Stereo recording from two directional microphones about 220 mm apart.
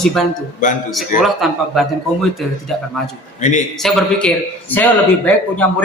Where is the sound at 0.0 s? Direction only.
Centre (ahead or behind).